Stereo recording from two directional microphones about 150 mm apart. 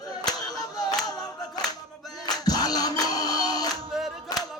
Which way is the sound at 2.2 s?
25° left (ahead or behind).